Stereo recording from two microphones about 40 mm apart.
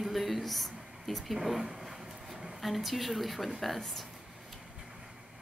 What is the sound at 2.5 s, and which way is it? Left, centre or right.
A woman's voice, centre.